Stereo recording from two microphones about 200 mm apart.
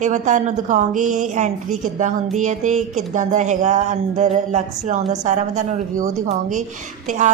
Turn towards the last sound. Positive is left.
turn(degrees=-35)  # may be behind; listen again after turning